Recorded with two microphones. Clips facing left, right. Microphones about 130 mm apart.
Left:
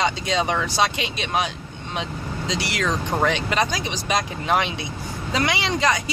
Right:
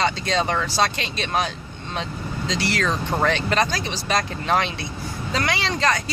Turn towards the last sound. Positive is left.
turn(degrees=15)  # may be behind; listen again after turning